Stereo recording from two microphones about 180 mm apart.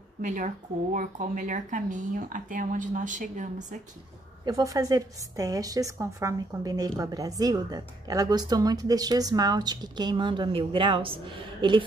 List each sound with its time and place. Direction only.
0.2 s speech: 45° right (ahead or behind)
4.5 s a woman's voice: 20° right (ahead or behind)